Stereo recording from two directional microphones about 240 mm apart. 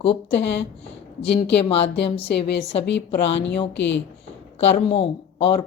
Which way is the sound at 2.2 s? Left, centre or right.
Left.